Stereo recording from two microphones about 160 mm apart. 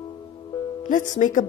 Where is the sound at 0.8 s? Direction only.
50° left (ahead or behind).